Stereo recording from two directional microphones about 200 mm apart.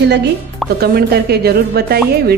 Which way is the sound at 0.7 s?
55° right (ahead or behind).